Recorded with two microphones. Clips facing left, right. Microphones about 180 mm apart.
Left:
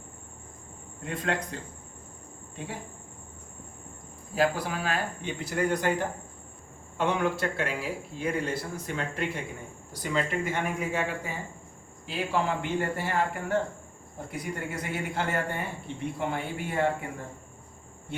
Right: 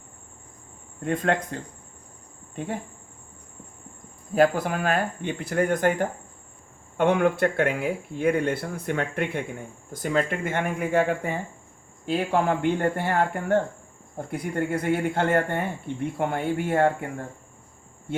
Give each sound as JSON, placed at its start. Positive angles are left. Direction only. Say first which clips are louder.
{"t": 1.0, "sound": "speech", "louder": "right 6 dB", "side_deg": -50}
{"t": 4.4, "sound": "speech", "louder": "right 6 dB", "side_deg": -50}